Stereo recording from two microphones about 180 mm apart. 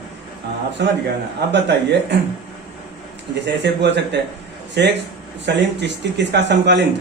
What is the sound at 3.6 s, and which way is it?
A man's voice, 75° right (ahead or behind).